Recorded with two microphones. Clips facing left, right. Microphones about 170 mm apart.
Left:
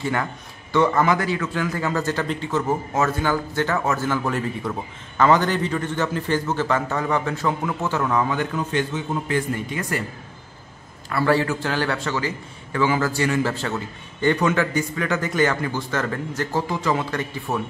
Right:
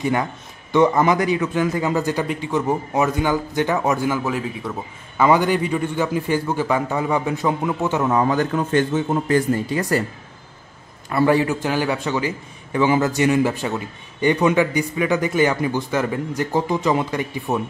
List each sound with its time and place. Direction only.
0.0 s a man's voice: 15° right (ahead or behind)
8.2 s a man's voice: 40° right (ahead or behind)
9.7 s speech: 35° right (ahead or behind)
11.1 s a man's voice: 20° right (ahead or behind)